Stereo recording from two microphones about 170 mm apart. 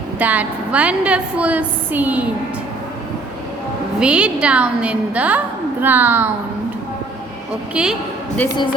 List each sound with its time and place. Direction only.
0.2 s a woman's voice: 10° right (ahead or behind)
4.0 s a woman's voice: 5° right (ahead or behind)
7.7 s a woman's voice: 5° right (ahead or behind)
8.4 s speech: 25° left (ahead or behind)